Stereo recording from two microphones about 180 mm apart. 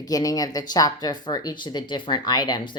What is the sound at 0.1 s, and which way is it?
Speech, 20° left (ahead or behind).